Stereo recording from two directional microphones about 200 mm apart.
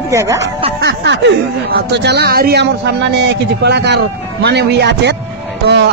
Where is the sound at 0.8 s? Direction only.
60° right (ahead or behind).